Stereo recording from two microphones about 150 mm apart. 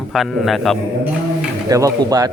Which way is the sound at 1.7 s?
20° right (ahead or behind).